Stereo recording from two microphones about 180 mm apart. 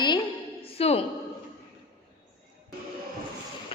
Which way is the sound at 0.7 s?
35° left (ahead or behind).